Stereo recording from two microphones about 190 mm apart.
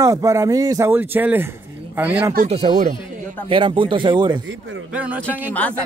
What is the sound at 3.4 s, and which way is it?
Speech, 25° right (ahead or behind).